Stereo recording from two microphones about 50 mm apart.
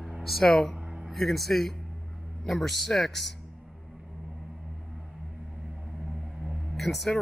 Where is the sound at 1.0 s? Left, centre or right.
Centre.